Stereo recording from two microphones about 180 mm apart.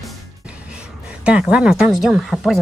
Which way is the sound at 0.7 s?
5° right (ahead or behind).